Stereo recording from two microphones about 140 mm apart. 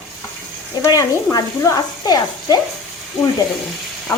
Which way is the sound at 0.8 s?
25° left (ahead or behind).